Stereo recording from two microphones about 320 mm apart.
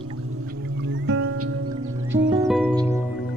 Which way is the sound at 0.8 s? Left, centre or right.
Right.